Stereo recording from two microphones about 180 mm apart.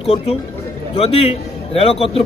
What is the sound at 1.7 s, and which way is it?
Speech, 30° left (ahead or behind).